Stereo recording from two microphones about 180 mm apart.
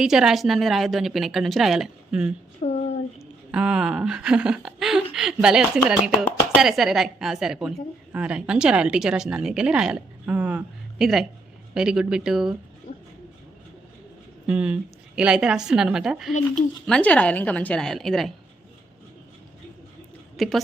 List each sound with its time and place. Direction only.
0.0 s a woman's voice: 5° right (ahead or behind)
2.6 s a sound: 35° left (ahead or behind)
3.2 s a woman's voice: 5° right (ahead or behind)
14.4 s a woman's voice: 5° right (ahead or behind)
20.3 s a woman's voice: centre (ahead or behind)